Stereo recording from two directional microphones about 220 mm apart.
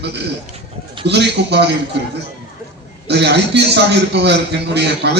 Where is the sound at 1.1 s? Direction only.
50° right (ahead or behind).